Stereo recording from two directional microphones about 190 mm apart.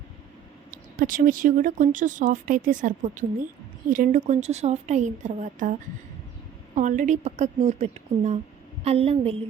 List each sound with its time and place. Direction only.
0.7 s a woman's voice: 45° right (ahead or behind)
6.7 s a woman's voice: 40° right (ahead or behind)